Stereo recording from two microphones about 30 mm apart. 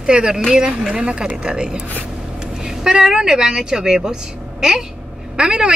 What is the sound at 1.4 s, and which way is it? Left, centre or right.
Speech, right.